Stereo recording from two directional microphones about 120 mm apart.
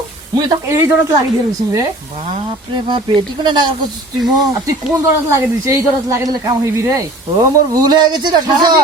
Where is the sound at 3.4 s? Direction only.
35° right (ahead or behind).